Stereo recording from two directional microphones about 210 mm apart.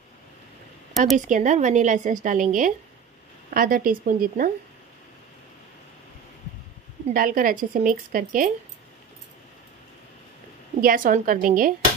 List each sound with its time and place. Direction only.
1.1 s a woman's voice: 35° right (ahead or behind)
7.2 s a woman's voice: 40° right (ahead or behind)
10.8 s a woman's voice: 40° right (ahead or behind)